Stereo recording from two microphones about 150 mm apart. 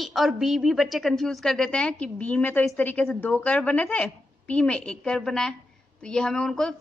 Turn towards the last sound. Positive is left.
turn(degrees=5)  # may be behind; listen again after turning